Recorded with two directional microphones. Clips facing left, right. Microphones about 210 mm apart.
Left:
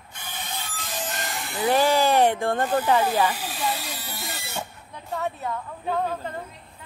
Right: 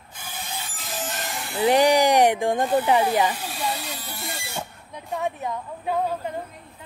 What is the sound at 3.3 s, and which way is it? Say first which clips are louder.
Speech: even; 5° left (ahead or behind).